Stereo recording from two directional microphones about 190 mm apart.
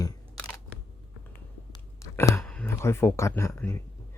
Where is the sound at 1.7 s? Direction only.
15° left (ahead or behind).